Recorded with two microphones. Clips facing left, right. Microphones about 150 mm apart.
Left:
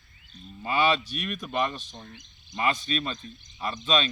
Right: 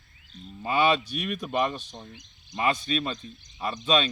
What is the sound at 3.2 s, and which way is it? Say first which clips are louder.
Speech: even; 20° right (ahead or behind).